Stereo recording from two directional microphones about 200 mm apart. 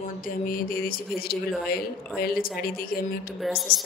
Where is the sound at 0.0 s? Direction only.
45° left (ahead or behind).